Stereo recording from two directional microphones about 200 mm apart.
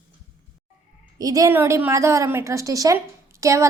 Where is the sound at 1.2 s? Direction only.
15° right (ahead or behind).